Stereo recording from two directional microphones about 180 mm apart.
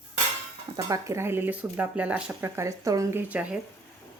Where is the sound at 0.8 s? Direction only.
20° right (ahead or behind).